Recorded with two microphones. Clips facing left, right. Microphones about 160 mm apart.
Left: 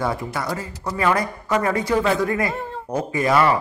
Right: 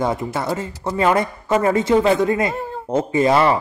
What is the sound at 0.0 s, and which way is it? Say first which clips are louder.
Speech: right 3 dB; 20° right (ahead or behind).